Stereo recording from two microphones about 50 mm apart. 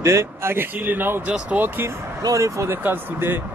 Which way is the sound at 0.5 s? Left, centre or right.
Right.